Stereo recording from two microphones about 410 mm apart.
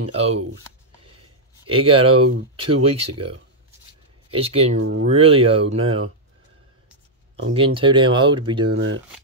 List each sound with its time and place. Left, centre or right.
0.1 s speech: centre
1.7 s speech: centre
2.0 s speech: right
2.5 s speech: centre
7.4 s speech: centre
8.6 s speech: right